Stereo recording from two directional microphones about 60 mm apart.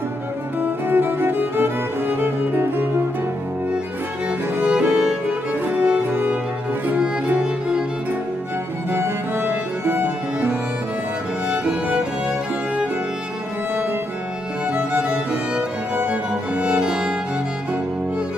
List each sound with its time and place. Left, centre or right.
0.6 s music: right
4.6 s music: right
5.7 s music: right
8.9 s music: right
11.4 s music: centre
14.9 s music: right